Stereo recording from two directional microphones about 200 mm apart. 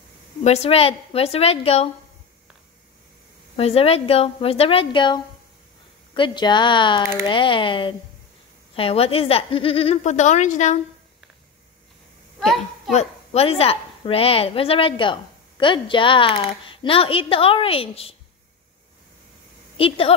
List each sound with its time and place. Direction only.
0.4 s a woman's voice: 35° left (ahead or behind)
3.5 s a woman's voice: 30° left (ahead or behind)
12.4 s a sound: centre (ahead or behind)
12.9 s a woman's voice: 30° left (ahead or behind)
19.8 s a woman's voice: 30° left (ahead or behind)